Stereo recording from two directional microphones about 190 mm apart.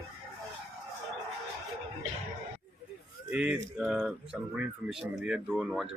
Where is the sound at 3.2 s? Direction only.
5° right (ahead or behind).